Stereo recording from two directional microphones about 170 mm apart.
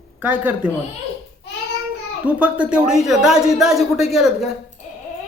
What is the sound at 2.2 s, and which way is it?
Speech, 5° right (ahead or behind).